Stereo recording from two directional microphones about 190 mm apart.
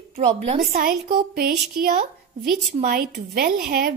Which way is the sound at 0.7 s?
50° right (ahead or behind).